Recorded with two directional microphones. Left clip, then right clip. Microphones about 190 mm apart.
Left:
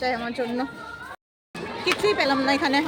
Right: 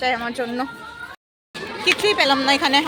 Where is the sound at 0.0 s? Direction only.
10° left (ahead or behind).